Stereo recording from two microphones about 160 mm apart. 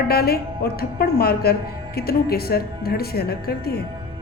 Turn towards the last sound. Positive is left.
turn(degrees=75)  # may be behind; listen again after turning